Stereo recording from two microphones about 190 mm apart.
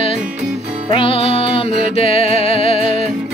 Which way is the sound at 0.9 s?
30° left (ahead or behind).